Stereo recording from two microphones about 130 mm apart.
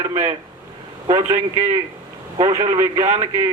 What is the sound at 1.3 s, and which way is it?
Speech, 55° right (ahead or behind).